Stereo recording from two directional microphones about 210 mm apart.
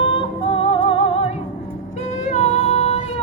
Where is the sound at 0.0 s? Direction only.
25° left (ahead or behind).